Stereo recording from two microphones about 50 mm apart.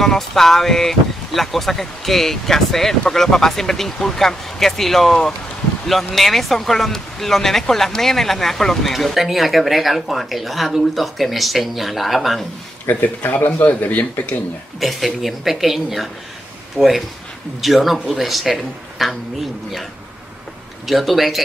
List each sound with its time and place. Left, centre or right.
0.0 s speech: centre
13.0 s a man's voice: left
14.8 s speech: centre
20.8 s speech: centre